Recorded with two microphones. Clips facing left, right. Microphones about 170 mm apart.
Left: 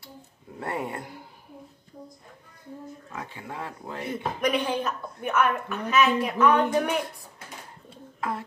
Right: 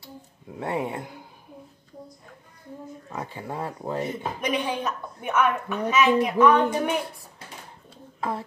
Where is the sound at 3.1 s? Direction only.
40° right (ahead or behind).